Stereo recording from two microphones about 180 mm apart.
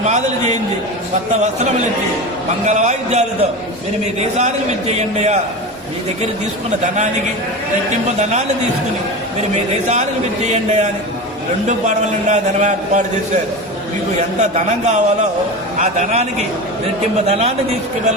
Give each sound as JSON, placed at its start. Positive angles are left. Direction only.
{"t": 2.6, "sound": "a man's voice", "side_deg": -40}
{"t": 6.8, "sound": "a man's voice", "side_deg": -40}
{"t": 10.4, "sound": "a man's voice", "side_deg": -40}
{"t": 11.9, "sound": "a man's voice", "side_deg": -40}
{"t": 14.3, "sound": "a man's voice", "side_deg": -40}
{"t": 17.2, "sound": "a man's voice", "side_deg": -35}